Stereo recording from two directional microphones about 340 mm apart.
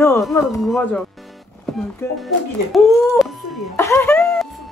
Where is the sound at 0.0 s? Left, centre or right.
Centre.